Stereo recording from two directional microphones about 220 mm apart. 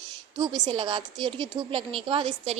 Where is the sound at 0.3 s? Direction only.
20° right (ahead or behind).